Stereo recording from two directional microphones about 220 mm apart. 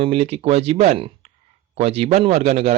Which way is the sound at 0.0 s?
25° right (ahead or behind).